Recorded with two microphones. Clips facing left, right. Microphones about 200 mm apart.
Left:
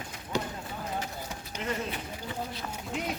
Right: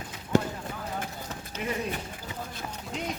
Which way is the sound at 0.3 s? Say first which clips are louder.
Right 7 dB; 50° right (ahead or behind).